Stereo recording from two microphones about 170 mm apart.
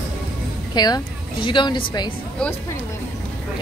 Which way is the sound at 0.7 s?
25° left (ahead or behind).